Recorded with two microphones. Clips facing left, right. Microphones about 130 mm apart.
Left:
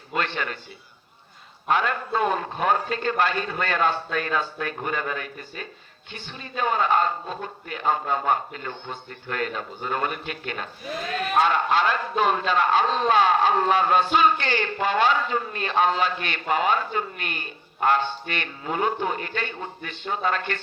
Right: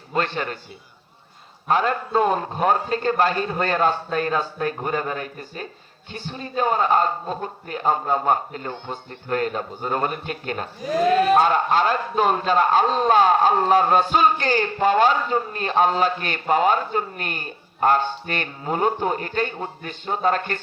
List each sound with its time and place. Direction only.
0.1 s a man's voice: 35° right (ahead or behind)
1.6 s a man's voice: 35° right (ahead or behind)